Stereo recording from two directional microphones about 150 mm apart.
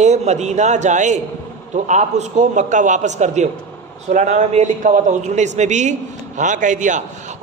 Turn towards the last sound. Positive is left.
turn(degrees=-55)  # may be behind; listen again after turning